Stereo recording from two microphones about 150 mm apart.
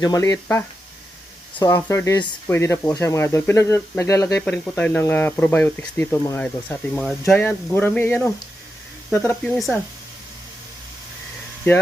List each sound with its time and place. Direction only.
0.0 s speech: 25° left (ahead or behind)
1.7 s speech: 20° left (ahead or behind)
4.4 s speech: 10° left (ahead or behind)
9.6 s speech: centre (ahead or behind)